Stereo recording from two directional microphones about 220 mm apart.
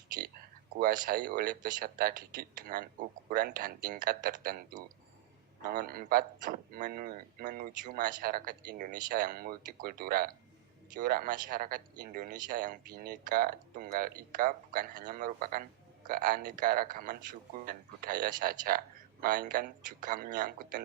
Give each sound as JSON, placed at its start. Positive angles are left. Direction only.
{"t": 0.7, "sound": "a man's voice", "side_deg": -40}
{"t": 5.6, "sound": "a man's voice", "side_deg": -40}